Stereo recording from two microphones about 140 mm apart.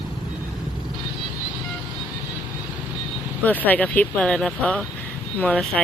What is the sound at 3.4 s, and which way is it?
Speech, 10° left (ahead or behind).